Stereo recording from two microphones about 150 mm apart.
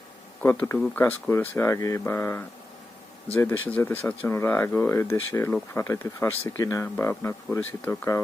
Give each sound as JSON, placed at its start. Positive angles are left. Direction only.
{"t": 0.4, "sound": "speech", "side_deg": 15}